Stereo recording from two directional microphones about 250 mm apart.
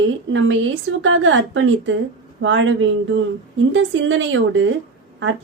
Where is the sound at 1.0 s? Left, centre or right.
Right.